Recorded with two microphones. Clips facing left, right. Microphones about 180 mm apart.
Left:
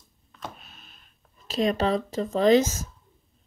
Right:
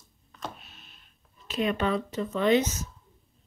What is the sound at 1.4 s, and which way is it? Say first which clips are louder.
Speech: left 3 dB; 40° left (ahead or behind).